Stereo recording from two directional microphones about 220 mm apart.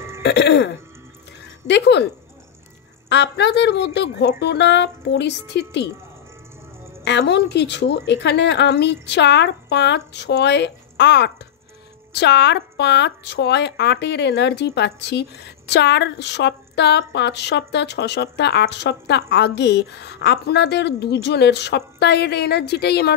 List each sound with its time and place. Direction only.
0.2 s speech: 50° left (ahead or behind)
3.1 s speech: 50° left (ahead or behind)
7.1 s speech: 50° left (ahead or behind)